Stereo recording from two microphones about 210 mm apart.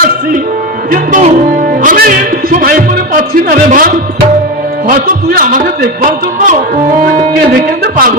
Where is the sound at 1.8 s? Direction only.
40° right (ahead or behind).